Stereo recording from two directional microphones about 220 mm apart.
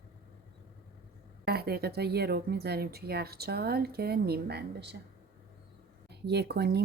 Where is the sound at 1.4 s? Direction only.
45° right (ahead or behind).